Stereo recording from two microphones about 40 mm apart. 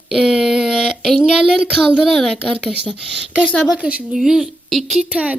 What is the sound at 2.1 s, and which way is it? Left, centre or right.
Speech, centre.